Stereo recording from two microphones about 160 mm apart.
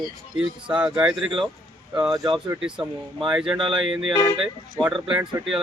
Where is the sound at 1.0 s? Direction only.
5° right (ahead or behind).